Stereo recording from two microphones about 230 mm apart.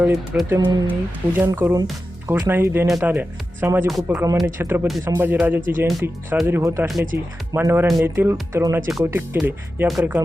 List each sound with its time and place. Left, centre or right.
0.0 s speech: centre
0.6 s speech: centre
6.8 s speech: centre